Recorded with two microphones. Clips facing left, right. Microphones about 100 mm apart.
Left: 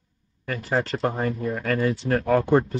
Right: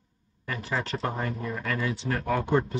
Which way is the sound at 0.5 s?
40° left (ahead or behind).